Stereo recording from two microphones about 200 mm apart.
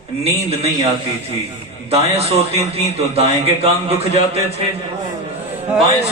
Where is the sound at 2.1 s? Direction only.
30° right (ahead or behind).